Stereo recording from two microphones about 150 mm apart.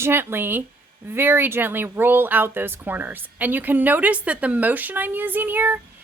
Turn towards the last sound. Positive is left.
turn(degrees=-10)  # may be behind; listen again after turning